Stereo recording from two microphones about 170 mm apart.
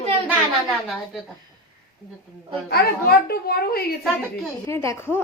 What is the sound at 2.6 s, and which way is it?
A child's voice, 65° left (ahead or behind).